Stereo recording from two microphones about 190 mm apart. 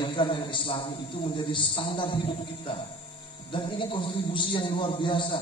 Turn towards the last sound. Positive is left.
turn(degrees=25)  # may be behind; listen again after turning